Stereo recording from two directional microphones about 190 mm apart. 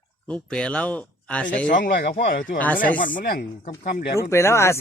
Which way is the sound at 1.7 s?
50° left (ahead or behind).